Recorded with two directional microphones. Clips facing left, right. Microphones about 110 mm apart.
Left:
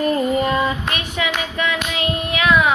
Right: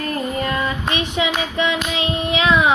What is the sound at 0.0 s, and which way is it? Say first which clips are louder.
Child singing: left 5 dB; 20° left (ahead or behind).